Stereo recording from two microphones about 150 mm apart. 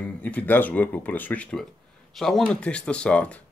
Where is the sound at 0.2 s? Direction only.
10° left (ahead or behind).